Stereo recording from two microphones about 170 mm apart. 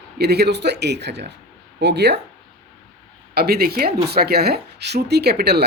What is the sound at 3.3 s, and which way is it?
Speech, 65° right (ahead or behind).